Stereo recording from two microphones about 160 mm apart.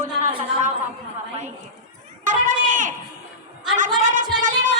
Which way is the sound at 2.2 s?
55° right (ahead or behind).